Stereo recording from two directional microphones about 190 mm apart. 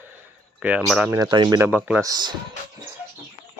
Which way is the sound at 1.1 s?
20° right (ahead or behind).